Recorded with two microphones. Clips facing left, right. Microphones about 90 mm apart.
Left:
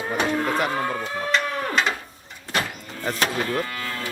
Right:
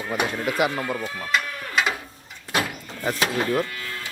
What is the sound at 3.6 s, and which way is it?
Livestock, 60° left (ahead or behind).